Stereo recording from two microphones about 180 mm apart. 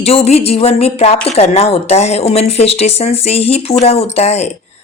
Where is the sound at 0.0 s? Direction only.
35° left (ahead or behind).